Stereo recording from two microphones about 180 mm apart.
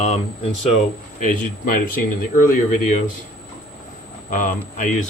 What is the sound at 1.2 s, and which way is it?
Speech, 50° left (ahead or behind).